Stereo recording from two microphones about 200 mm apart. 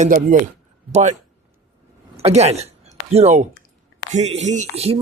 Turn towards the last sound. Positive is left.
turn(degrees=-30)  # may be behind; listen again after turning